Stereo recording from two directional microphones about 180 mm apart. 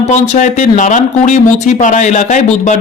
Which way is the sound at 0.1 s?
45° left (ahead or behind).